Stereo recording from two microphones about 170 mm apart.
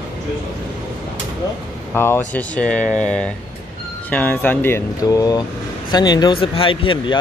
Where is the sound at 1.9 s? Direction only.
15° left (ahead or behind); by 7.1 s 30° left (ahead or behind).